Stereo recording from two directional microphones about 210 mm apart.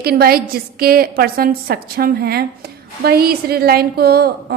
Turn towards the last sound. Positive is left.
turn(degrees=-50)  # may be behind; listen again after turning